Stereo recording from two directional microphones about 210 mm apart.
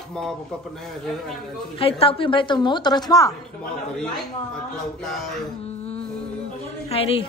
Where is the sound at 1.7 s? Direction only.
25° left (ahead or behind).